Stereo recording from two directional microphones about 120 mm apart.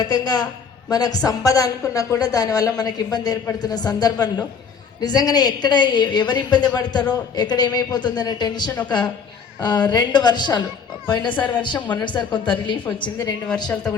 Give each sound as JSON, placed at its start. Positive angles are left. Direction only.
{"t": 0.0, "sound": "a woman's voice", "side_deg": 35}